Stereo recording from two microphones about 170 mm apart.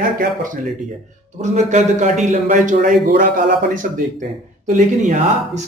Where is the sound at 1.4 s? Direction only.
45° right (ahead or behind).